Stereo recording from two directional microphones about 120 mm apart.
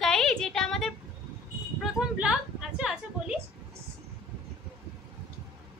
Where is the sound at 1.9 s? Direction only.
5° right (ahead or behind).